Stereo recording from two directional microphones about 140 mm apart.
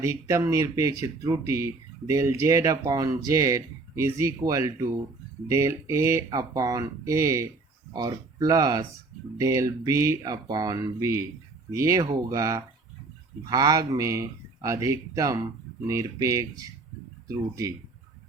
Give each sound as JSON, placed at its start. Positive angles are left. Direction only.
{"t": 0.0, "sound": "speech", "side_deg": -20}